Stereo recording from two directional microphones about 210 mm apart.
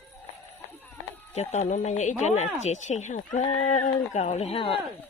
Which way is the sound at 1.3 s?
35° left (ahead or behind).